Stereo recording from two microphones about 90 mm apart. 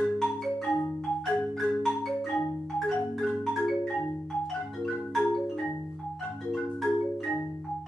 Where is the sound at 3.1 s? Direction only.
5° left (ahead or behind).